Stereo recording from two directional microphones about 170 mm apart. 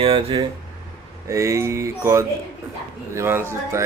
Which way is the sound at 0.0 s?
35° right (ahead or behind).